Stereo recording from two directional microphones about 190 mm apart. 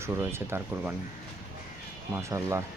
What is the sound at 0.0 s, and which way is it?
Speech, 15° right (ahead or behind).